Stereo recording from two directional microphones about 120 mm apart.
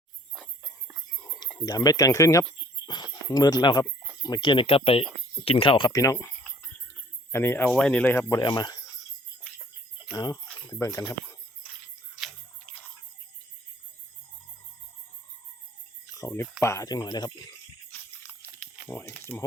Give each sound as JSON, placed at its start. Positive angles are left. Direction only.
{"t": 1.6, "sound": "speech", "side_deg": 30}
{"t": 2.8, "sound": "speech", "side_deg": 35}
{"t": 4.6, "sound": "speech", "side_deg": 55}
{"t": 5.9, "sound": "speech", "side_deg": 25}
{"t": 8.4, "sound": "speech", "side_deg": 35}
{"t": 10.1, "sound": "speech", "side_deg": 35}
{"t": 16.1, "sound": "speech", "side_deg": 25}
{"t": 18.9, "sound": "speech", "side_deg": 20}